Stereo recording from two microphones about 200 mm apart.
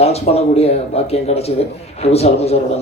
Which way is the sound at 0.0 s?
30° left (ahead or behind).